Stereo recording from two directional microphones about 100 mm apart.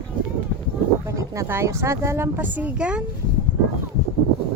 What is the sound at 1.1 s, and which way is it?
Speech, 30° right (ahead or behind).